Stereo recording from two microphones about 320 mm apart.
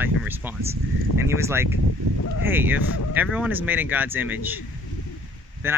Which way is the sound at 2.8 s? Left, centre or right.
Left.